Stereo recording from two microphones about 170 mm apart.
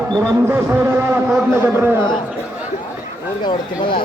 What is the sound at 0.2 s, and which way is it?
Speech, 15° right (ahead or behind).